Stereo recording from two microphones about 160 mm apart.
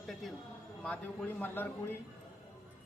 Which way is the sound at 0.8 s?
10° left (ahead or behind).